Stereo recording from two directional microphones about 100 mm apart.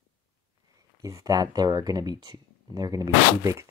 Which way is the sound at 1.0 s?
35° right (ahead or behind).